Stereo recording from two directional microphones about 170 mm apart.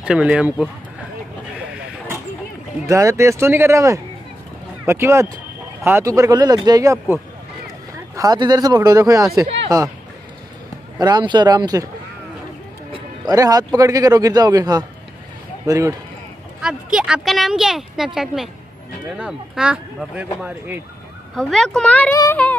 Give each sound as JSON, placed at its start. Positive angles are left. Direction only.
{"t": 0.0, "sound": "speech", "side_deg": -5}
{"t": 2.9, "sound": "speech", "side_deg": -20}
{"t": 8.2, "sound": "speech", "side_deg": -25}
{"t": 11.0, "sound": "speech", "side_deg": -25}
{"t": 13.3, "sound": "speech", "side_deg": -20}
{"t": 16.6, "sound": "speech", "side_deg": -5}
{"t": 21.4, "sound": "speech", "side_deg": 5}
{"t": 22.2, "sound": "a sound", "side_deg": 10}